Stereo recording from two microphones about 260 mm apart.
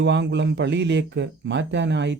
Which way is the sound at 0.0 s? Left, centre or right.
Right.